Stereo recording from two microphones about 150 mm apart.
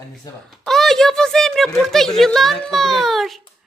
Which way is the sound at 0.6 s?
Centre (ahead or behind).